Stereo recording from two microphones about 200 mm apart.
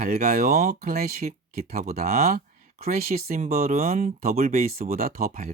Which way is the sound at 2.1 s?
35° right (ahead or behind).